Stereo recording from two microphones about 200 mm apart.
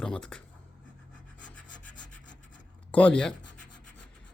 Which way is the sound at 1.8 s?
40° left (ahead or behind).